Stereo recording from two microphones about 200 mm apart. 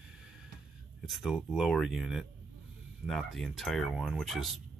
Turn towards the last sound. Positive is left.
turn(degrees=0)  # may be behind; listen again after turning